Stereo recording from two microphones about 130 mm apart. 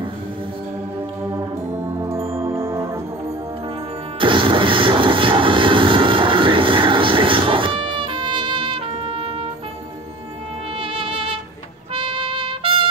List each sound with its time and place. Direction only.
1.3 s brass instrument: 20° right (ahead or behind)
4.2 s vehicle: 40° right (ahead or behind)
10.8 s music: 40° right (ahead or behind)